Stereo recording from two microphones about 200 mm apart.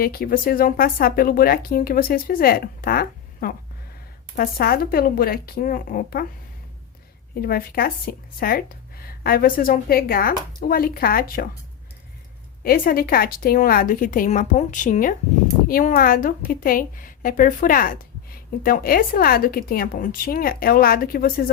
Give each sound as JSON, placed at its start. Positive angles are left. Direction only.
{"t": 0.0, "sound": "speech", "side_deg": 50}
{"t": 7.3, "sound": "speech", "side_deg": 50}
{"t": 12.6, "sound": "speech", "side_deg": 45}